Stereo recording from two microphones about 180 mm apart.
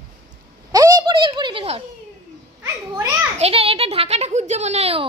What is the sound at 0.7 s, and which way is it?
Speech, 20° right (ahead or behind).